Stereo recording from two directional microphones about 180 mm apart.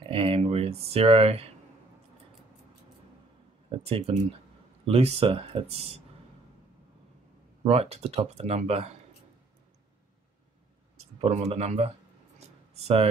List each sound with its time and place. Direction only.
0.1 s speech: 30° right (ahead or behind)
3.7 s speech: 35° right (ahead or behind)
7.6 s speech: 35° right (ahead or behind)
11.1 s speech: 35° right (ahead or behind)